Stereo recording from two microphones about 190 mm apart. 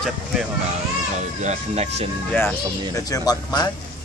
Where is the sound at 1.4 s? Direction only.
35° right (ahead or behind).